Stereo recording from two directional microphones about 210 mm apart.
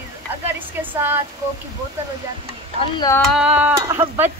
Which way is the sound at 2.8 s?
20° left (ahead or behind).